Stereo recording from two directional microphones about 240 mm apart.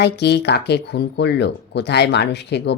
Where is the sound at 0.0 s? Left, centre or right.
Left.